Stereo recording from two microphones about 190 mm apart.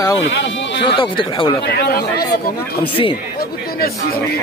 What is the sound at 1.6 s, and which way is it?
Speech, 60° left (ahead or behind).